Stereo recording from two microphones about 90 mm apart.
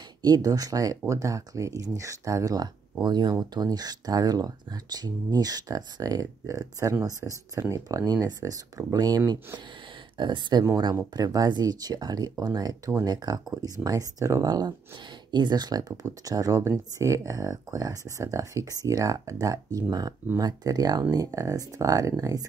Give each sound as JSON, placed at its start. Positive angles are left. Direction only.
{"t": 0.2, "sound": "speech", "side_deg": -45}
{"t": 10.1, "sound": "speech", "side_deg": -60}
{"t": 11.1, "sound": "speech", "side_deg": -45}